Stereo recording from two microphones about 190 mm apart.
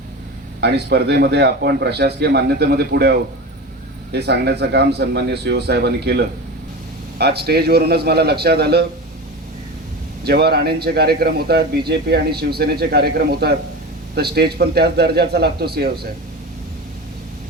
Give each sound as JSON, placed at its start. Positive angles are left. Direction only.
{"t": 0.6, "sound": "a man's voice", "side_deg": -60}
{"t": 10.2, "sound": "a man's voice", "side_deg": -55}